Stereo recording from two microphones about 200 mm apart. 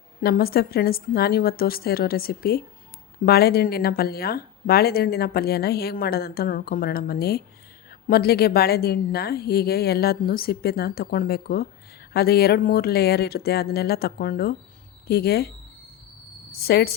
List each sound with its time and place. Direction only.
0.2 s a woman's voice: 50° left (ahead or behind)
16.5 s a woman's voice: 50° left (ahead or behind)